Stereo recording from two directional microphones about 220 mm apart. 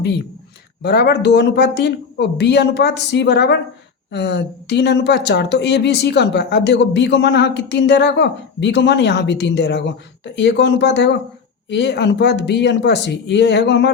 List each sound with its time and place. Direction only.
0.8 s speech: 45° left (ahead or behind)